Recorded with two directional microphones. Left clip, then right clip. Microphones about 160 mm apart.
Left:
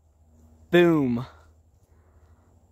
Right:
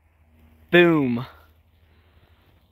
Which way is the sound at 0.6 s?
10° left (ahead or behind).